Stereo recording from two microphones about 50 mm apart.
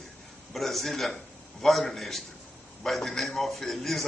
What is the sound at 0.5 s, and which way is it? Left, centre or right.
A man's voice, centre.